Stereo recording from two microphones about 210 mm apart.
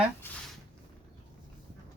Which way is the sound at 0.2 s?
10° left (ahead or behind).